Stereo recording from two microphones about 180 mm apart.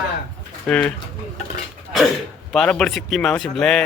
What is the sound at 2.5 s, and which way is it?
A man's voice, 5° left (ahead or behind).